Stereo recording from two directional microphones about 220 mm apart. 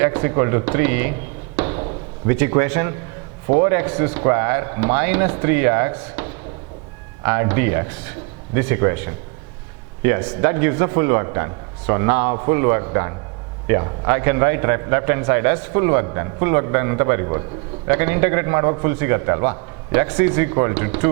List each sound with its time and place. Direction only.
0.0 s a man's voice: 15° right (ahead or behind)
2.2 s a man's voice: 15° right (ahead or behind)
10.0 s a man's voice: 15° right (ahead or behind)